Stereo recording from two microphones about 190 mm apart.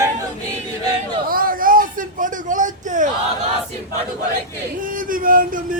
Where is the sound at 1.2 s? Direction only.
50° right (ahead or behind).